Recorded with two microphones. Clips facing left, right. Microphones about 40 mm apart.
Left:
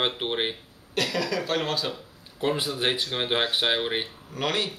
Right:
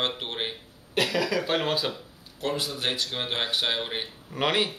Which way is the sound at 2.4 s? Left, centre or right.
Centre.